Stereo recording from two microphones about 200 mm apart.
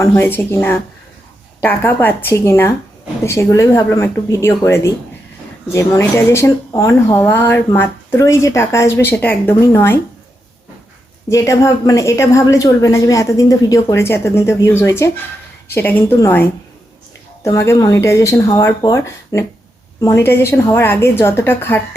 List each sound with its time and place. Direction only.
0.0 s speech: 10° left (ahead or behind)
11.3 s speech: 15° left (ahead or behind)